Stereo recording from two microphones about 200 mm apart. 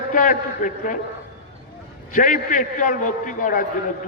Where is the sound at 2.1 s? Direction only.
40° left (ahead or behind).